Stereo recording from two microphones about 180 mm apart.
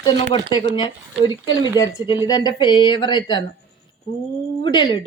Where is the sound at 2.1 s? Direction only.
25° left (ahead or behind).